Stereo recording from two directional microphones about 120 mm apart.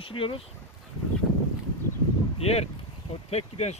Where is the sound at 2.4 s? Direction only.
60° left (ahead or behind).